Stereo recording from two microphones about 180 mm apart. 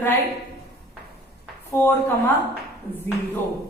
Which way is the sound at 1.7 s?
10° left (ahead or behind).